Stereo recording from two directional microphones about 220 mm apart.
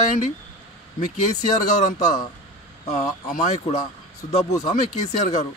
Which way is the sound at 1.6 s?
30° left (ahead or behind).